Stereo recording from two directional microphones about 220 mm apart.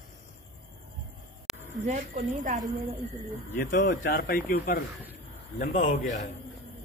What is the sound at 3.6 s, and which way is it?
Speech, 50° left (ahead or behind).